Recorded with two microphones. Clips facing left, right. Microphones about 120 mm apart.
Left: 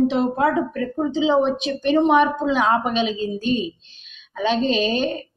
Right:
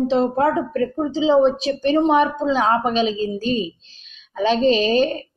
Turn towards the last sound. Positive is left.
turn(degrees=-35)  # may be behind; listen again after turning